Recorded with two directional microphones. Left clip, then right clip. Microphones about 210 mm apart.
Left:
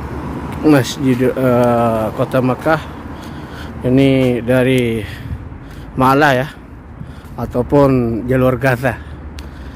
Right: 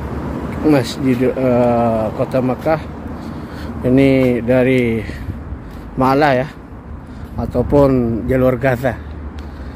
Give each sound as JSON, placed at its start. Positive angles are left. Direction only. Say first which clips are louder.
{"t": 0.7, "sound": "speech", "louder": "left 2 dB", "side_deg": 20}
{"t": 3.5, "sound": "speech", "louder": "even", "side_deg": 10}